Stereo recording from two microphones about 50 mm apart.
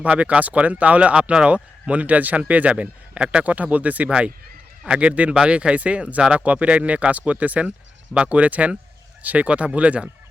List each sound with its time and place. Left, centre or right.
0.0 s speech: right